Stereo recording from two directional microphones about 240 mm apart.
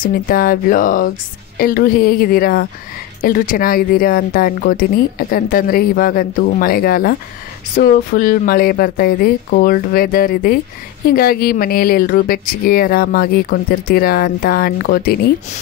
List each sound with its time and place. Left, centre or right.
0.0 s speech: left